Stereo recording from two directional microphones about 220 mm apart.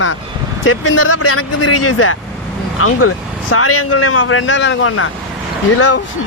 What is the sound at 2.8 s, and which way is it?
Speech, 75° left (ahead or behind).